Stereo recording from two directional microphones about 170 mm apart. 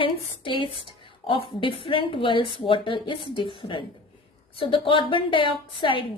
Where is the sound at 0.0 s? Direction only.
30° left (ahead or behind).